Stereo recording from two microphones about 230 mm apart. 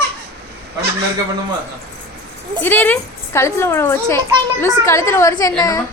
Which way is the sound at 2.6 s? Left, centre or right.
Centre.